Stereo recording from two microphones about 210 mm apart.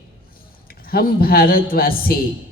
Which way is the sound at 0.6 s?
45° left (ahead or behind).